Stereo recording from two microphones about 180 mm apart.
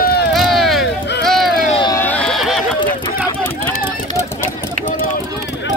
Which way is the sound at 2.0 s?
5° left (ahead or behind).